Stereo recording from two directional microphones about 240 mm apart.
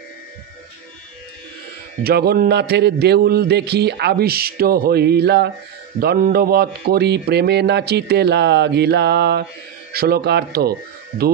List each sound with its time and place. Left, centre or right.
2.0 s speech: right